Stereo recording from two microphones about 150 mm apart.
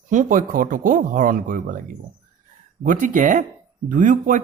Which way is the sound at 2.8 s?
60° right (ahead or behind).